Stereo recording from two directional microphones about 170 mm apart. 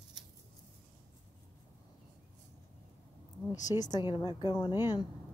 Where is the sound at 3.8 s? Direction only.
25° left (ahead or behind).